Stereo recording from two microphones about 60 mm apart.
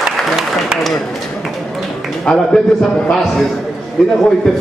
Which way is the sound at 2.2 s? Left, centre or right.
Centre.